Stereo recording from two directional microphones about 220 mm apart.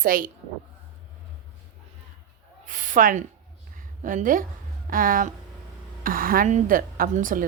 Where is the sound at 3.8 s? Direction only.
35° right (ahead or behind).